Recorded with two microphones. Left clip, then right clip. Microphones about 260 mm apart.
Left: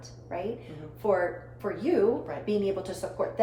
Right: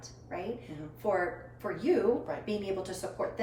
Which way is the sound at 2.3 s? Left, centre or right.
Centre.